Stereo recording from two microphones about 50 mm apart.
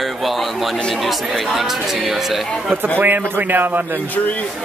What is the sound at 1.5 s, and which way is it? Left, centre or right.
Speech, centre.